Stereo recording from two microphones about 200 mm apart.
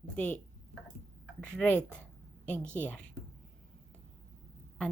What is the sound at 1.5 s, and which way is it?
Speech, 10° left (ahead or behind).